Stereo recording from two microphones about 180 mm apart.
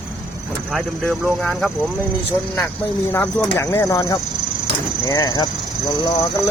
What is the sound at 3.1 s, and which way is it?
Speech, 10° left (ahead or behind).